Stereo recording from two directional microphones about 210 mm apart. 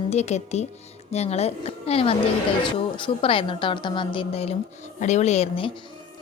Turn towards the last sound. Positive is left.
turn(degrees=30)  # may be behind; listen again after turning